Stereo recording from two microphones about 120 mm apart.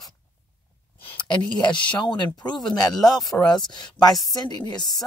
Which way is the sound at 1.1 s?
40° left (ahead or behind).